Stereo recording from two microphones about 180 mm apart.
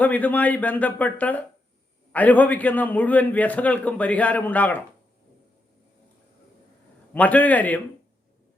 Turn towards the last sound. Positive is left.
turn(degrees=10)  # may be behind; listen again after turning